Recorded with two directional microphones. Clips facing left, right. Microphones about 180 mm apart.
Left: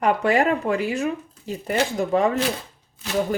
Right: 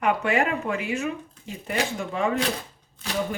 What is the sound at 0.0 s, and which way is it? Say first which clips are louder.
Speech: left 4 dB; 35° left (ahead or behind).